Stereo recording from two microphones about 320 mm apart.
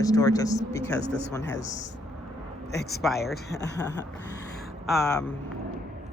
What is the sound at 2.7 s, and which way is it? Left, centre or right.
A man's voice, left.